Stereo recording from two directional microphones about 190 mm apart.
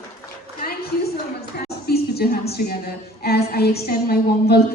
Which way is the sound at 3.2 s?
55° left (ahead or behind).